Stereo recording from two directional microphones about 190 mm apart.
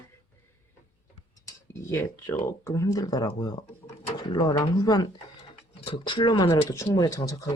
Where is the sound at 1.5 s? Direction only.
15° left (ahead or behind).